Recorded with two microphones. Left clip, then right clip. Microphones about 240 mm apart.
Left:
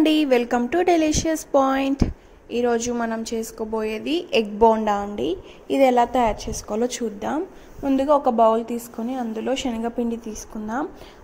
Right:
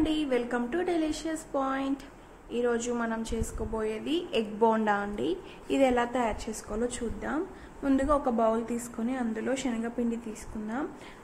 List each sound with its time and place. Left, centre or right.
0.0 s a woman's voice: left